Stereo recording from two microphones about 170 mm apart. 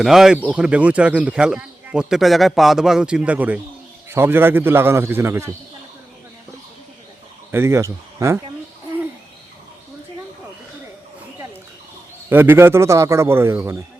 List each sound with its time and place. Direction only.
0.0 s a man's voice: centre (ahead or behind)
7.5 s a man's voice: 15° right (ahead or behind)
12.3 s a man's voice: 10° right (ahead or behind)